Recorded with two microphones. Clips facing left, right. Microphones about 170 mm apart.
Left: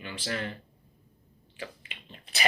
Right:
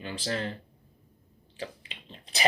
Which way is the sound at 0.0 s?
35° right (ahead or behind).